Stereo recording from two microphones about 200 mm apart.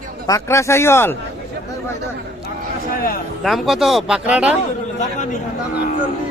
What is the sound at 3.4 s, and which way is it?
Speech, centre (ahead or behind).